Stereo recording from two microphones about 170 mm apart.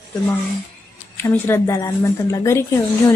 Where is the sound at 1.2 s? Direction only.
15° left (ahead or behind).